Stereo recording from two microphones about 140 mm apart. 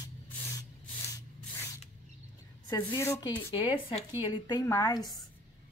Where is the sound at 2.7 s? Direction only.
25° left (ahead or behind).